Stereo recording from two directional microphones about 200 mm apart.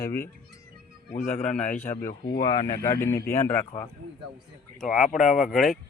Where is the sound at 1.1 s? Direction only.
40° left (ahead or behind).